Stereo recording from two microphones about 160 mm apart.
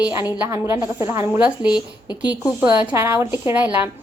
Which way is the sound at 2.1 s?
25° left (ahead or behind).